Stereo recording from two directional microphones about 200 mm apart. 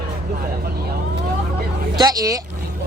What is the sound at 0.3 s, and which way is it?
Vehicle, 50° right (ahead or behind).